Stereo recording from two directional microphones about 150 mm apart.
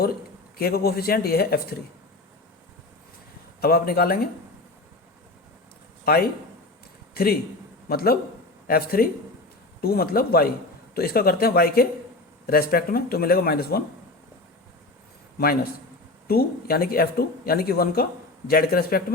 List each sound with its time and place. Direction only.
0.6 s speech: 90° left
3.6 s speech: 90° left
6.1 s a man's voice: 90° left
16.2 s speech: 90° left